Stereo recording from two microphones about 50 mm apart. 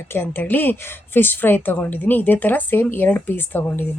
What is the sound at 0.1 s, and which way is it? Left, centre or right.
A woman's voice, left.